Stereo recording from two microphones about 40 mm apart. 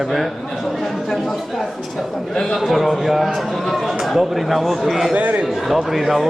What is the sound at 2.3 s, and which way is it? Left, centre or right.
Speech, centre.